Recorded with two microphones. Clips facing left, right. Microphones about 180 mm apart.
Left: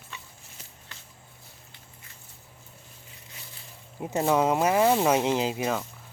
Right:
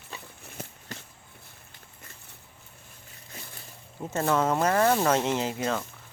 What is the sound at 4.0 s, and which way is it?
Speech, 15° left (ahead or behind).